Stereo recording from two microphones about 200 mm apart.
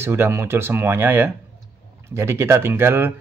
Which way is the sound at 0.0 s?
10° right (ahead or behind).